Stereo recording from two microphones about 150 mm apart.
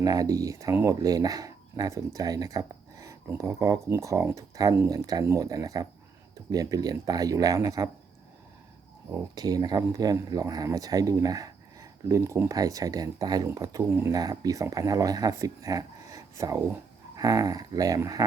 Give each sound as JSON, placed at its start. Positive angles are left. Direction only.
{"t": 0.0, "sound": "speech", "side_deg": -25}
{"t": 9.1, "sound": "speech", "side_deg": -25}